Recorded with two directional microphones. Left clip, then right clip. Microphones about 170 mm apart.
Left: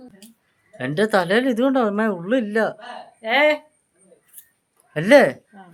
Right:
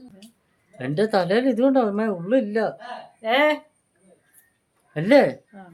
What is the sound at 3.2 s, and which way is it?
Speech, 25° right (ahead or behind).